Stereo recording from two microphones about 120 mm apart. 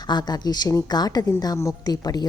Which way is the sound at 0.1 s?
35° left (ahead or behind).